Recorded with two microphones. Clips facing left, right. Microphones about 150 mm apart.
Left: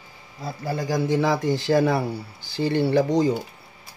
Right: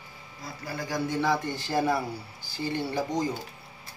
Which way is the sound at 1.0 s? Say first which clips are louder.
Left 5 dB; 90° left.